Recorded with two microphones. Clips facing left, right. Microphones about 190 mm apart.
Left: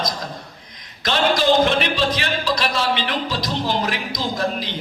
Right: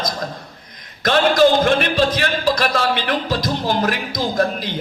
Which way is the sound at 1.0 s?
50° right (ahead or behind).